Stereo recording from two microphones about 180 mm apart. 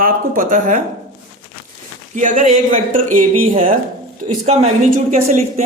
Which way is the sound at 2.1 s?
45° right (ahead or behind).